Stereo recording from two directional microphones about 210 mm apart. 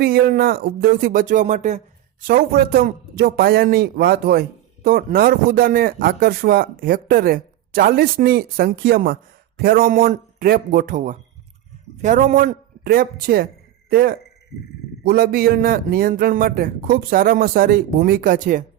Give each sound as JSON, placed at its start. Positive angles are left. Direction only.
{"t": 0.0, "sound": "a man's voice", "side_deg": -45}